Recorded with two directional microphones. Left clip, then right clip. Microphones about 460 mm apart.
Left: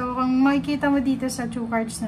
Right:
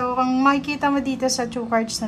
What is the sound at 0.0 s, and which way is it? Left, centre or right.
A woman's voice, centre.